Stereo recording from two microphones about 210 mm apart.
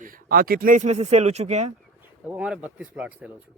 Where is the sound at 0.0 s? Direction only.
45° right (ahead or behind).